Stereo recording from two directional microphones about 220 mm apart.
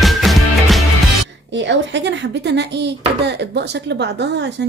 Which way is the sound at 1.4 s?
55° right (ahead or behind).